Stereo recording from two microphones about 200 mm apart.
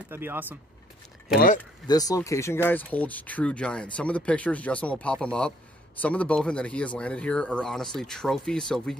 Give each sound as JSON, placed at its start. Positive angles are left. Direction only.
{"t": 0.1, "sound": "speech", "side_deg": -10}
{"t": 1.9, "sound": "speech", "side_deg": 20}